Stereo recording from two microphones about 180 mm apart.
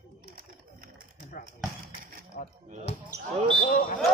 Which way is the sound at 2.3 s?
50° left (ahead or behind).